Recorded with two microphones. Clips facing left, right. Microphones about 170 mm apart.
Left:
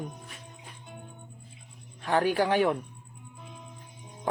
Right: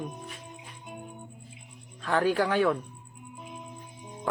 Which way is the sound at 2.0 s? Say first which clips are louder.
Left 1 dB; 15° left (ahead or behind).